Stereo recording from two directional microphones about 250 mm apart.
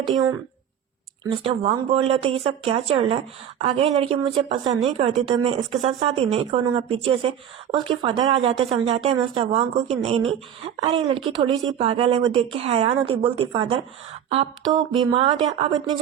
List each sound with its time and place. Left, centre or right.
1.2 s speech: centre